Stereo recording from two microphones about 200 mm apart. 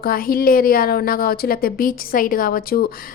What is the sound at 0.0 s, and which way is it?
A woman's voice, 45° left (ahead or behind).